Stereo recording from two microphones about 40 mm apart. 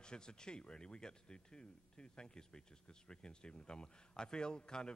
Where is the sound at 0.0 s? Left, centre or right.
Left.